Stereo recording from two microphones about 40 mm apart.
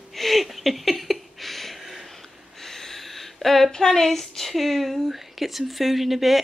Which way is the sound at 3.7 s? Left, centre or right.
Centre.